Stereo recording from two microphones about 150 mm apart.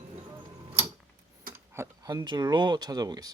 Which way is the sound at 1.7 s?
20° right (ahead or behind).